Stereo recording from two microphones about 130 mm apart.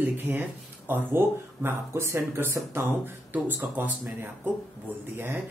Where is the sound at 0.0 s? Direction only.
15° right (ahead or behind).